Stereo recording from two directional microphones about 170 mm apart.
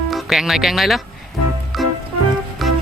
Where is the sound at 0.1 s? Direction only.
Centre (ahead or behind).